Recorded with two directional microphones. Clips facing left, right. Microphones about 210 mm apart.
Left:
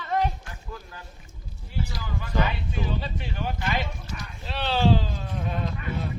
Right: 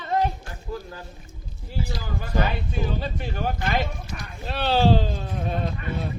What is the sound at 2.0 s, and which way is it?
Speech, 45° right (ahead or behind).